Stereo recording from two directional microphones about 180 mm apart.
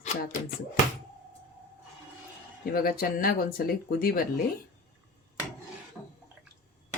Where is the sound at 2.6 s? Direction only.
55° left (ahead or behind).